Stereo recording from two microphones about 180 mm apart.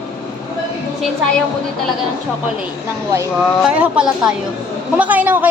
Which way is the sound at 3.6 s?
5° right (ahead or behind).